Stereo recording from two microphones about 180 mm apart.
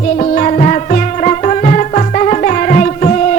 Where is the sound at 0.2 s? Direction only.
40° left (ahead or behind).